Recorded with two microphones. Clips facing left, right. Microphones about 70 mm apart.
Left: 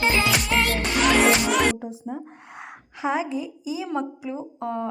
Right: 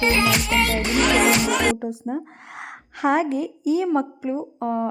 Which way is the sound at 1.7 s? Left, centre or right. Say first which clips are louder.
Right 5 dB; right.